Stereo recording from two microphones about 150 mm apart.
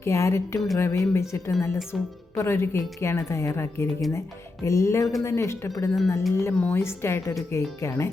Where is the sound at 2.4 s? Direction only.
20° left (ahead or behind).